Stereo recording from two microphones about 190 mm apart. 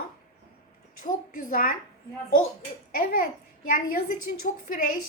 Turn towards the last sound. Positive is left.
turn(degrees=45)  # may be behind; listen again after turning